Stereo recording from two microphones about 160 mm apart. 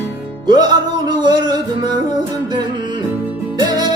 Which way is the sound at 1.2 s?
25° right (ahead or behind).